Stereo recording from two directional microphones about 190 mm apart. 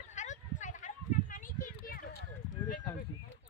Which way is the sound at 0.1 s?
40° left (ahead or behind).